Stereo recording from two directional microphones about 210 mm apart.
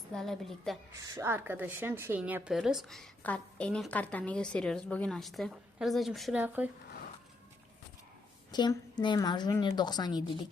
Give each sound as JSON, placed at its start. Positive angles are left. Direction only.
{"t": 0.1, "sound": "speech", "side_deg": 0}
{"t": 1.1, "sound": "speech", "side_deg": -10}
{"t": 8.5, "sound": "a woman's voice", "side_deg": 20}